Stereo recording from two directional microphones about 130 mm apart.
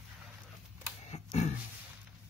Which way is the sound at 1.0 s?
55° left (ahead or behind).